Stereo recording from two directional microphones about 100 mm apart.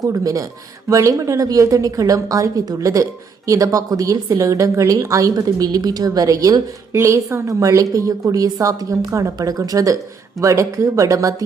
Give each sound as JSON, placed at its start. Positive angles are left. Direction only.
{"t": 0.0, "sound": "a woman's voice", "side_deg": -35}